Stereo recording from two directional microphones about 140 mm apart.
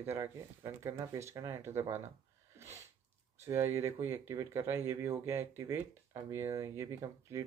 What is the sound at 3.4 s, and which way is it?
Speech, 20° right (ahead or behind).